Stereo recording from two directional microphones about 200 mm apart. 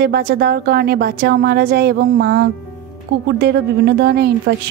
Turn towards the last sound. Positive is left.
turn(degrees=-55)  # may be behind; listen again after turning